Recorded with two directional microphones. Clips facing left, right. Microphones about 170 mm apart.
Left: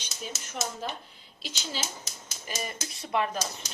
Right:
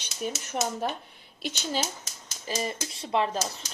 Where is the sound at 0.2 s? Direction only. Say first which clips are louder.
Right 6 dB; 55° right (ahead or behind).